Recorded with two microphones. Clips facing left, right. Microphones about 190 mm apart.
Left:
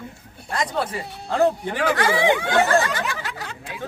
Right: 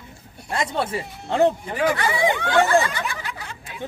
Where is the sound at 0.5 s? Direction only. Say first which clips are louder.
Right 1 dB; 25° right (ahead or behind).